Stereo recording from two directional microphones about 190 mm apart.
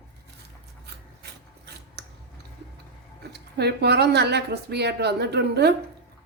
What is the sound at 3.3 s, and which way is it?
Speech, 60° right (ahead or behind).